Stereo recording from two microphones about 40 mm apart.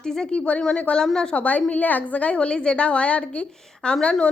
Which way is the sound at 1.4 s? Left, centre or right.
Left.